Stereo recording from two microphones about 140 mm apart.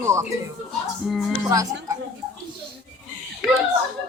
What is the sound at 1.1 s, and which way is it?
Speech, centre (ahead or behind).